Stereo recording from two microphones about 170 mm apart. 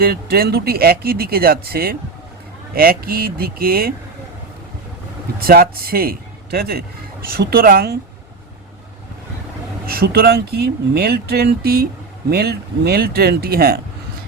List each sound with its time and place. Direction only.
0.0 s speech: 65° right (ahead or behind)
5.4 s speech: 65° right (ahead or behind)
9.8 s speech: 65° right (ahead or behind)